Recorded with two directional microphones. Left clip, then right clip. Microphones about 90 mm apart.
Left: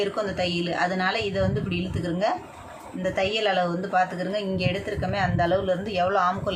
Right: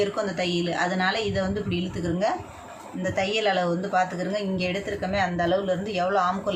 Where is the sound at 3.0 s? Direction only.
25° left (ahead or behind).